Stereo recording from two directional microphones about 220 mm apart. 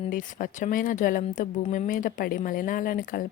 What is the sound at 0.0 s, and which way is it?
Speech, 35° left (ahead or behind).